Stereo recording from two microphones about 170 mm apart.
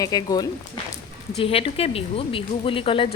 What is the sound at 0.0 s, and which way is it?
Speech, 20° left (ahead or behind).